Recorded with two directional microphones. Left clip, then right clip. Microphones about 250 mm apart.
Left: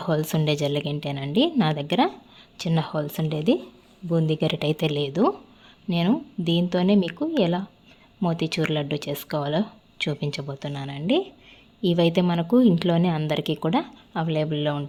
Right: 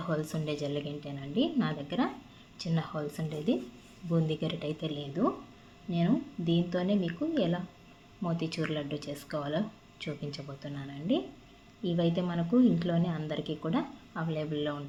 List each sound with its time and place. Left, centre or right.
0.0 s a woman's voice: left